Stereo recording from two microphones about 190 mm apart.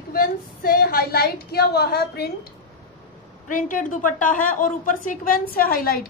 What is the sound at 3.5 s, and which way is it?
A woman's voice, 45° left (ahead or behind).